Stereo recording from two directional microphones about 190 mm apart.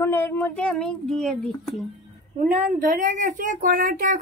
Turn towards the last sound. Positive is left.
turn(degrees=-45)  # may be behind; listen again after turning